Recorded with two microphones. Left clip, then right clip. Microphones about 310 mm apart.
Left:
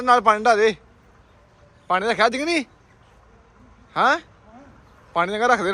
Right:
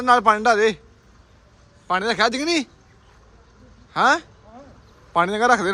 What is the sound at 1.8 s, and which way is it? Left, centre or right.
Speech, centre.